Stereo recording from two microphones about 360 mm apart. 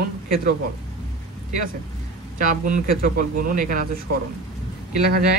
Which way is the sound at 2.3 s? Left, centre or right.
Right.